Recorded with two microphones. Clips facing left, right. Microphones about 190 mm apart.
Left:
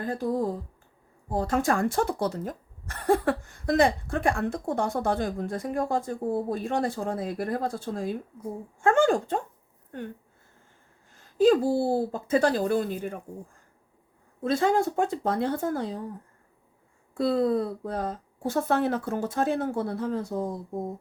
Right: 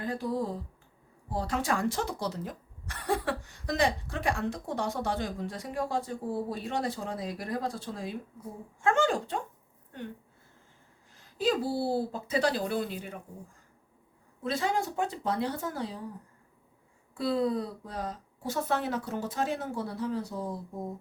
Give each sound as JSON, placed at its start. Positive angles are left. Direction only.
{"t": 0.0, "sound": "speech", "side_deg": 45}
{"t": 11.1, "sound": "speech", "side_deg": 50}
{"t": 14.4, "sound": "speech", "side_deg": 50}
{"t": 17.2, "sound": "speech", "side_deg": 50}